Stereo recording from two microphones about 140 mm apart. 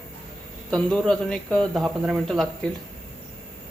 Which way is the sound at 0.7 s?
5° left (ahead or behind).